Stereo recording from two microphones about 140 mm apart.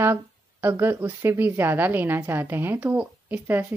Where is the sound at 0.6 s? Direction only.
20° right (ahead or behind).